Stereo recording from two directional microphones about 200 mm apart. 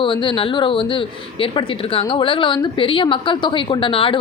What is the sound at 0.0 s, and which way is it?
A woman's voice, 25° left (ahead or behind).